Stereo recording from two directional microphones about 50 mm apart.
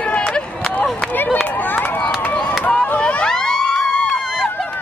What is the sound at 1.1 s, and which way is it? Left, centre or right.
Run, left.